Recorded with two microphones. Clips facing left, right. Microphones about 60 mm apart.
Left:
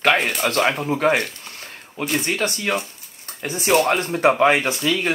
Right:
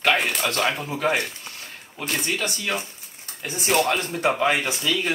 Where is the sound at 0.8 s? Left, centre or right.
Left.